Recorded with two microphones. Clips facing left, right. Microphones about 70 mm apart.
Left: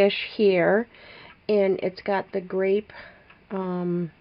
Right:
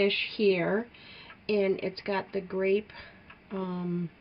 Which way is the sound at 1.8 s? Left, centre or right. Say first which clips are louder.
Left 6 dB; left.